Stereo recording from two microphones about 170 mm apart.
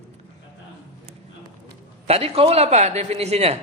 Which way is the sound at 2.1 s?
35° right (ahead or behind).